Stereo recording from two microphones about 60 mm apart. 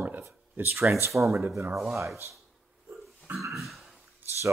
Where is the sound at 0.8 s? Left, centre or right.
Right.